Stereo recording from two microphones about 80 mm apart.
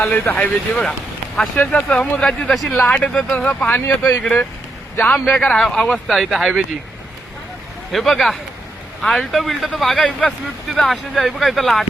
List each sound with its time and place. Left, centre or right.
0.0 s speech: left
0.4 s speech: centre
3.8 s speech: left
4.2 s speech: centre
4.9 s speech: left; by 6.7 s centre
7.9 s speech: centre